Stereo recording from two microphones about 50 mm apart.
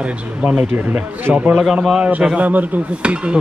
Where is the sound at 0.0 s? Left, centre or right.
Right.